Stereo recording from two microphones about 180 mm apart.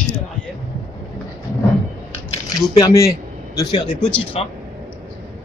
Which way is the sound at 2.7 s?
15° left (ahead or behind).